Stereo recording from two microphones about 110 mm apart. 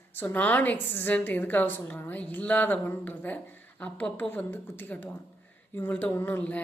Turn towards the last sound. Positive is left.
turn(degrees=15)  # may be behind; listen again after turning